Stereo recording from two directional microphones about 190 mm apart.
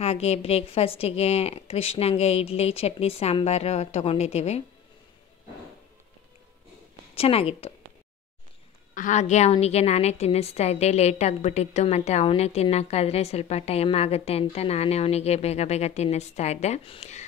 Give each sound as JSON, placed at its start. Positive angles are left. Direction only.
{"t": 0.0, "sound": "a woman's voice", "side_deg": 35}
{"t": 7.2, "sound": "a woman's voice", "side_deg": 30}
{"t": 8.9, "sound": "a woman's voice", "side_deg": 40}